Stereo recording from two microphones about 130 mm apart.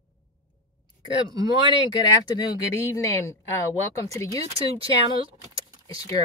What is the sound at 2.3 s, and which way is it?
Speech, 30° left (ahead or behind).